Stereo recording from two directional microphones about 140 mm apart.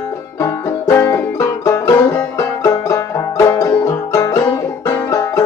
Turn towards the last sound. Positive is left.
turn(degrees=20)  # may be behind; listen again after turning